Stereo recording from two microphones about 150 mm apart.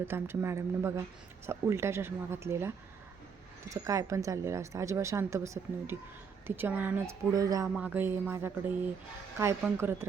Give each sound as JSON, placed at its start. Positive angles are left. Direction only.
{"t": 0.0, "sound": "a woman's voice", "side_deg": -15}
{"t": 7.3, "sound": "a woman's voice", "side_deg": -25}
{"t": 7.8, "sound": "a woman's voice", "side_deg": -10}